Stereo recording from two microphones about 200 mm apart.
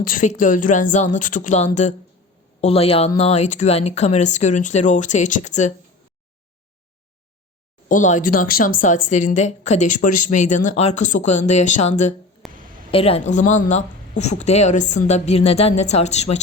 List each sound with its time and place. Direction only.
0.0 s speech: 40° left (ahead or behind)
7.9 s speech: 40° left (ahead or behind)
12.4 s a sound: centre (ahead or behind)
12.9 s speech: 30° left (ahead or behind)